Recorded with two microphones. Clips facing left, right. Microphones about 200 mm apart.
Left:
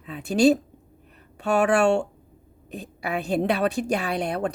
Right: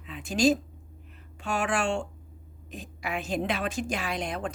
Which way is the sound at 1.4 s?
65° left (ahead or behind).